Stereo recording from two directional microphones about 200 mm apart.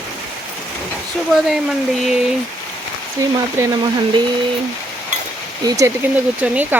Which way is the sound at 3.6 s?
20° right (ahead or behind).